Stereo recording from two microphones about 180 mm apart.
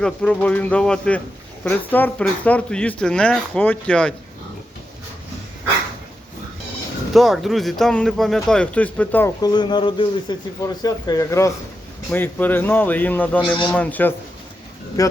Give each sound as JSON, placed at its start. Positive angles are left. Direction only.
{"t": 0.0, "sound": "speech", "side_deg": 5}
{"t": 7.1, "sound": "speech", "side_deg": 0}
{"t": 15.0, "sound": "speech", "side_deg": 20}